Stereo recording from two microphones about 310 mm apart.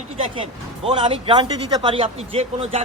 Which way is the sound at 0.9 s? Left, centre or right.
Centre.